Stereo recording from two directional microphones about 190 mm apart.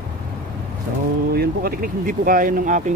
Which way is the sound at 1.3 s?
50° right (ahead or behind).